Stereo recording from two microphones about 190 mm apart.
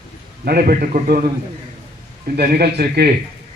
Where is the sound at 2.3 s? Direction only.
55° right (ahead or behind).